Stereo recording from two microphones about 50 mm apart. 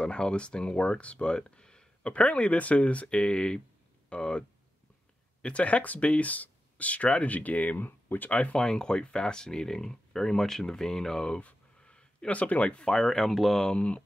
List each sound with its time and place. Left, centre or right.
0.0 s speech: left
8.5 s speech: centre
11.4 s a sound: left
12.8 s speech: centre
13.7 s speech: centre